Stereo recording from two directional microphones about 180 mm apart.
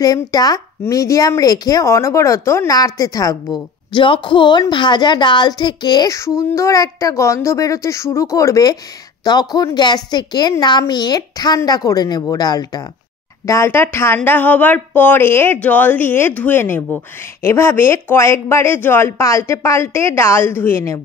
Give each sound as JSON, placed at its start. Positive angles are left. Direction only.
{"t": 0.0, "sound": "a woman's voice", "side_deg": 20}